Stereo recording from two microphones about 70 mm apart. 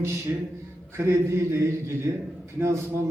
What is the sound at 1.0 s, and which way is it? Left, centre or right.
A man's voice, right.